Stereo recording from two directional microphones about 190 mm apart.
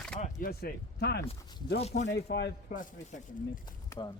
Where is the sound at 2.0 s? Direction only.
65° left (ahead or behind).